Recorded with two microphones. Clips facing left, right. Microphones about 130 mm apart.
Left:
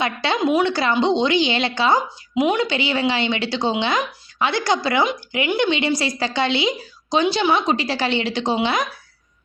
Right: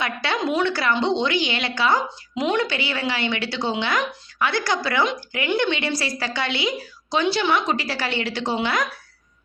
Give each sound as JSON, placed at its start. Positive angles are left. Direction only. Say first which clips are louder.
{"t": 0.0, "sound": "a woman's voice", "louder": "left 4 dB", "side_deg": 20}
{"t": 2.3, "sound": "a woman's voice", "louder": "left 4 dB", "side_deg": 10}